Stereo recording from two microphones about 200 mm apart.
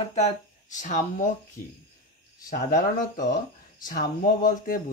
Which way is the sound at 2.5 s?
50° left (ahead or behind).